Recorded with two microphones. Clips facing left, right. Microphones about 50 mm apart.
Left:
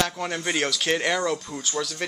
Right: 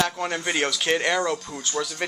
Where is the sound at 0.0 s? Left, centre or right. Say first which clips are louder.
Right 1 dB; centre.